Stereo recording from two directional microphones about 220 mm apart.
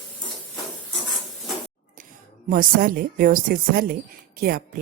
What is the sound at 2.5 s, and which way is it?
A woman's voice, 40° right (ahead or behind).